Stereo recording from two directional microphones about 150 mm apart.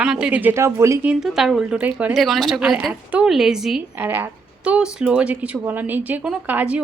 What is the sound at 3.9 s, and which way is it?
Speech, 15° right (ahead or behind).